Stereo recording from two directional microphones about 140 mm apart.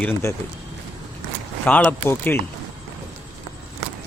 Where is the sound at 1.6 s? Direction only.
10° left (ahead or behind).